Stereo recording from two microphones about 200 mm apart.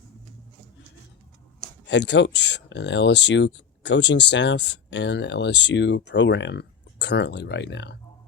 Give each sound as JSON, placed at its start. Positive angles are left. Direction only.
{"t": 1.9, "sound": "speech", "side_deg": 60}